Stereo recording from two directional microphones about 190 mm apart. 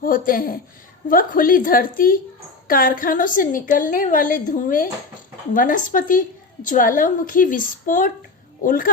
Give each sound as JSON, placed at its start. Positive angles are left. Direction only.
{"t": 0.0, "sound": "a woman's voice", "side_deg": 50}